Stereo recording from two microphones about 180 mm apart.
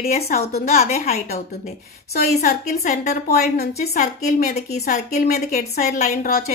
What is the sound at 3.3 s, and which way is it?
Speech, 60° left (ahead or behind).